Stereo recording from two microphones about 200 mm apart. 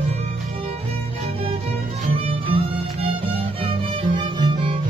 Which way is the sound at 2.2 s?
25° right (ahead or behind).